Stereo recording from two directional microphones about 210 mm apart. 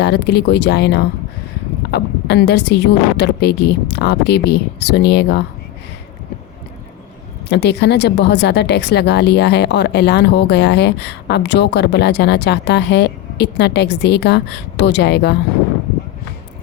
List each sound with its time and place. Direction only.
0.0 s speech: 50° left (ahead or behind)
7.5 s speech: 55° left (ahead or behind)